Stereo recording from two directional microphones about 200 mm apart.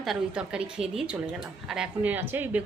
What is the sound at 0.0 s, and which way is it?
Speech, centre (ahead or behind).